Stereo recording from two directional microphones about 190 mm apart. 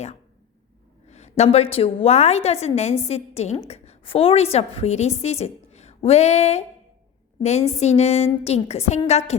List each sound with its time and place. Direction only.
1.0 s a woman's voice: 35° left (ahead or behind)
7.8 s a woman's voice: 35° left (ahead or behind)